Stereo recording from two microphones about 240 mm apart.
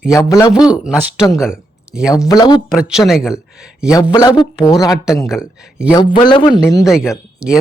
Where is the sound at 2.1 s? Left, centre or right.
Centre.